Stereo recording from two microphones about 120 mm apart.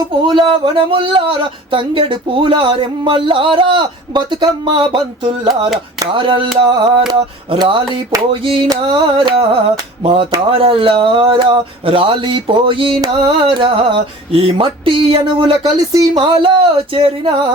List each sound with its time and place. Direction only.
0.3 s speech: 40° right (ahead or behind)
16.1 s speech: 45° right (ahead or behind)